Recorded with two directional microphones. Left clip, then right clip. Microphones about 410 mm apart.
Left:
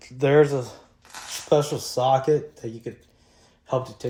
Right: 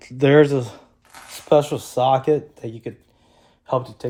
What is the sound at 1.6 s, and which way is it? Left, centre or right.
Speech, centre.